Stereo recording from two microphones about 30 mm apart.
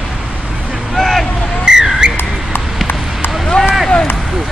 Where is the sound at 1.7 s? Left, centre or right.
Centre.